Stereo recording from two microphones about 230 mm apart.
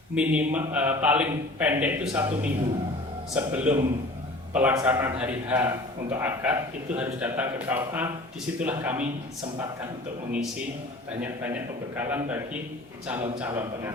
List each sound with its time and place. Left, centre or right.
0.2 s a man's voice: centre
11.2 s a man's voice: centre